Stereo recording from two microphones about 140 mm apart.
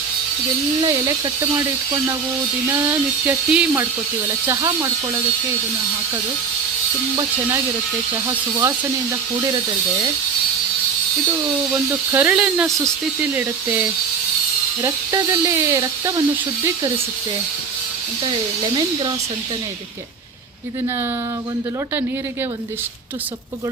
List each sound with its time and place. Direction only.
0.9 s speech: 25° right (ahead or behind)
2.6 s speech: 15° right (ahead or behind)
4.4 s speech: 25° right (ahead or behind)
8.3 s speech: 25° right (ahead or behind)
11.7 s speech: 15° right (ahead or behind)
18.3 s speech: 35° right (ahead or behind)